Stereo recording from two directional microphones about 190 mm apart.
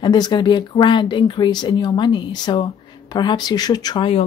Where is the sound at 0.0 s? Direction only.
25° left (ahead or behind).